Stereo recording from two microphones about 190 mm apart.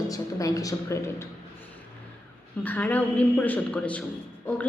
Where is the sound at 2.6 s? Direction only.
10° left (ahead or behind).